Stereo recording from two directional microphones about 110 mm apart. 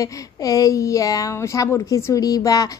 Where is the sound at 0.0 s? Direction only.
30° left (ahead or behind).